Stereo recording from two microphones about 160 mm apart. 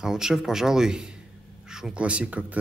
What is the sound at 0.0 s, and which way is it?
A man's voice, 5° right (ahead or behind).